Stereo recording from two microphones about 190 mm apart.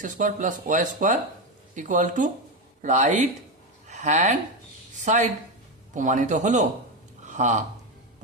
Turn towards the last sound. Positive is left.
turn(degrees=-40)  # may be behind; listen again after turning